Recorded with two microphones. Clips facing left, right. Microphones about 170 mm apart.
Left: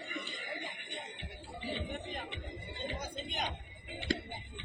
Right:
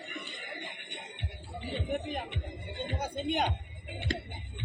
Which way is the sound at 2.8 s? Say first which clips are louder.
Right 7 dB; 60° right (ahead or behind).